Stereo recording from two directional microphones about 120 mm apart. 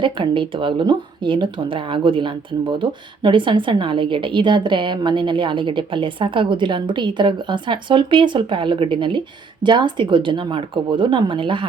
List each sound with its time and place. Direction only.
0.0 s speech: 45° right (ahead or behind)